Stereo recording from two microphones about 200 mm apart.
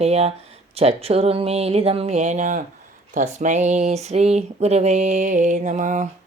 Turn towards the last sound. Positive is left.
turn(degrees=-40)  # may be behind; listen again after turning